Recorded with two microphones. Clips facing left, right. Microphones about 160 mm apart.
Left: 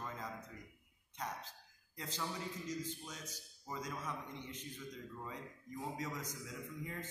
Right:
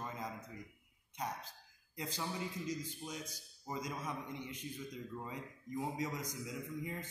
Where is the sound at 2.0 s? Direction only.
15° right (ahead or behind).